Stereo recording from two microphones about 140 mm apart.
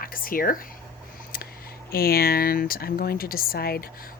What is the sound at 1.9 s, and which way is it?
Speech, 90° left.